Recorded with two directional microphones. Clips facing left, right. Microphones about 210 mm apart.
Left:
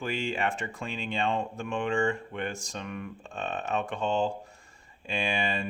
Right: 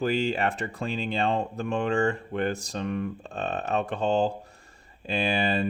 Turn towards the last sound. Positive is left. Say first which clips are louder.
# right 5 dB
turn(degrees=-35)  # may be behind; listen again after turning